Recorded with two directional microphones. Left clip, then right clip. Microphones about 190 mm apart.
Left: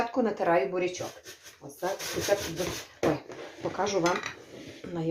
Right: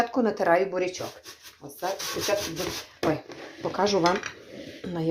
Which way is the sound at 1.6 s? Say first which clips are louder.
Right 2 dB; 55° right (ahead or behind).